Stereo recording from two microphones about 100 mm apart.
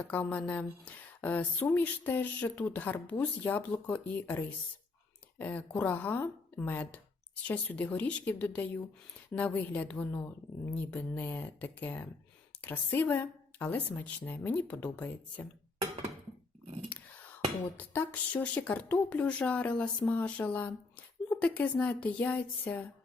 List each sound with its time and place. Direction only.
0.1 s speech: 15° left (ahead or behind)
17.7 s speech: 20° left (ahead or behind)